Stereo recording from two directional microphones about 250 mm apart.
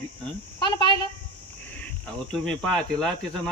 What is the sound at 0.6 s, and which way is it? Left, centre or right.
Speech, centre.